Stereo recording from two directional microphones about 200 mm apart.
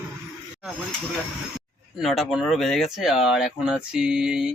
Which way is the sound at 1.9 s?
Centre (ahead or behind).